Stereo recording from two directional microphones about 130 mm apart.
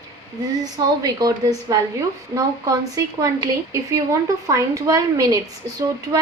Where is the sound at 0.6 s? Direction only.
30° right (ahead or behind).